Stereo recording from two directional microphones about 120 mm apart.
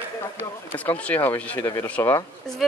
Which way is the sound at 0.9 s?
15° left (ahead or behind).